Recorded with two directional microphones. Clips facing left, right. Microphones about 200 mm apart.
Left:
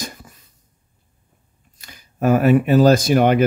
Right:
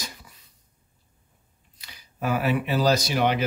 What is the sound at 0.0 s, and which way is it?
Cough, 50° left (ahead or behind).